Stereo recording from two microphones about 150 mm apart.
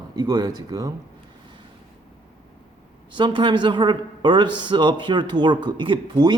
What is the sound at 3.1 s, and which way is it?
A man's voice, 30° right (ahead or behind).